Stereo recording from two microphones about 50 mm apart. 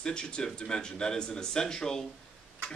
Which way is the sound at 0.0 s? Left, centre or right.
Centre.